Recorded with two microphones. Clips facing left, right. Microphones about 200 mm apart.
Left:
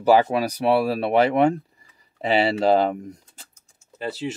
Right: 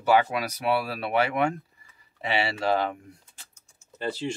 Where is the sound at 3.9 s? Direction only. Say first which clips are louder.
Left 2 dB; 5° left (ahead or behind).